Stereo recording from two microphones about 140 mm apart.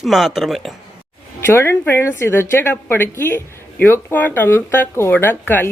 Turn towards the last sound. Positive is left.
turn(degrees=15)  # may be behind; listen again after turning